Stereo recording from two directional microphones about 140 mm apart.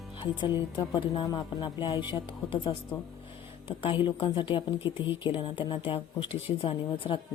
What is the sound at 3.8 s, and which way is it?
Speech, 35° left (ahead or behind).